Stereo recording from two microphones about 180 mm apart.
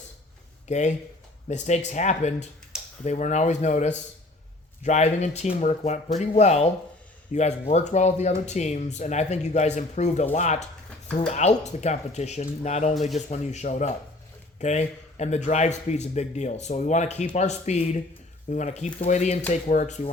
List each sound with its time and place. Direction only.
0.7 s speech: 40° left (ahead or behind)